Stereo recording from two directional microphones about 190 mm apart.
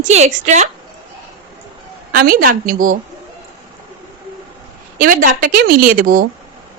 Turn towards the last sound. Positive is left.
turn(degrees=-45)  # may be behind; listen again after turning